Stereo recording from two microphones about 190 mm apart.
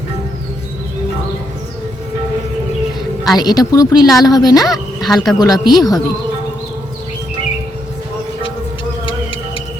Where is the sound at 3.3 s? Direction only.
20° left (ahead or behind).